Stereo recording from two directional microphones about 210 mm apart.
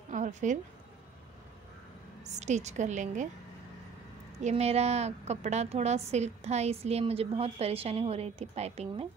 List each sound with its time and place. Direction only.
0.1 s a sound: 35° right (ahead or behind)
2.2 s a woman's voice: 35° right (ahead or behind)
4.4 s a woman's voice: 30° right (ahead or behind)